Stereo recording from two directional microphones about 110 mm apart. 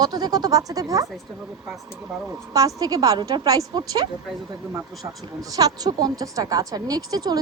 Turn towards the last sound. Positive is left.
turn(degrees=-35)  # may be behind; listen again after turning